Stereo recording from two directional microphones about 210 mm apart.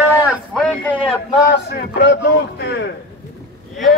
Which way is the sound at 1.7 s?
55° left (ahead or behind).